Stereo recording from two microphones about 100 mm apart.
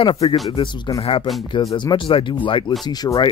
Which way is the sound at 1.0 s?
65° left (ahead or behind).